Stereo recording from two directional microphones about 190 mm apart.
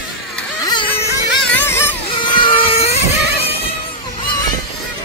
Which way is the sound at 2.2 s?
25° left (ahead or behind).